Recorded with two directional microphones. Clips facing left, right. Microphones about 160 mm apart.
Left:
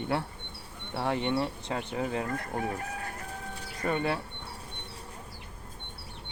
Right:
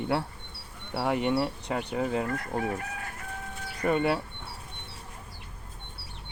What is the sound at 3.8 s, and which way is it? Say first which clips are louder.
Speech: right 4 dB; 20° right (ahead or behind).